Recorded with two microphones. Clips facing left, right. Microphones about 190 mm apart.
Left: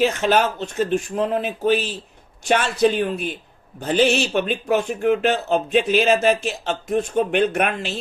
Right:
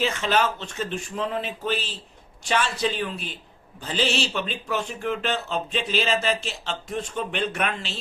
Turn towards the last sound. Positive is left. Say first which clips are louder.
# left 6 dB
turn(degrees=55)  # may be behind; listen again after turning